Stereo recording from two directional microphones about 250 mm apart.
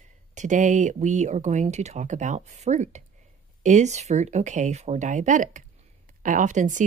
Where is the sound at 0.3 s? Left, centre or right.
Right.